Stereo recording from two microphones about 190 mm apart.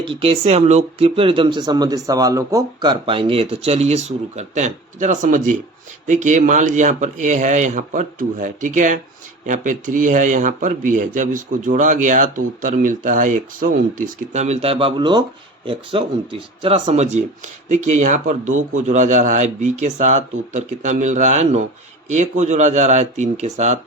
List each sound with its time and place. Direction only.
0.0 s a man's voice: 30° right (ahead or behind)